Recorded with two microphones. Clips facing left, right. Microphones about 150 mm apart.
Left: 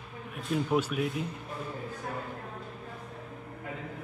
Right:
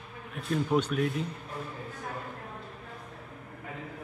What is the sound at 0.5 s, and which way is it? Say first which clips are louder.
Speech: right 1 dB; 5° left (ahead or behind).